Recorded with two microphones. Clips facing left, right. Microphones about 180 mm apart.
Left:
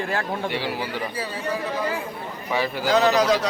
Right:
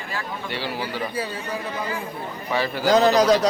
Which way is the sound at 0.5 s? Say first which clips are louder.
Left 1 dB; 15° left (ahead or behind).